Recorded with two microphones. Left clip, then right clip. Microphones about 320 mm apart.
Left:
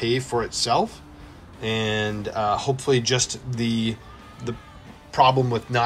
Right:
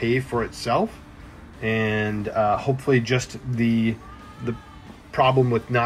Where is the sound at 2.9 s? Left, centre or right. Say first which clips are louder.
Left 1 dB; left.